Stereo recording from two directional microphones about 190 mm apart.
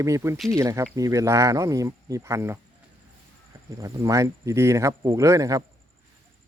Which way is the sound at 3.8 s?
15° right (ahead or behind).